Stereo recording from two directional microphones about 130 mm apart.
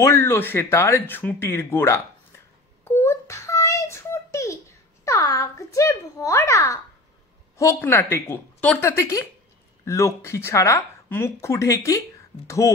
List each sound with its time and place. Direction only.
0.0 s speech: 20° left (ahead or behind)
2.8 s a sound: 20° left (ahead or behind)
7.5 s speech: 20° left (ahead or behind)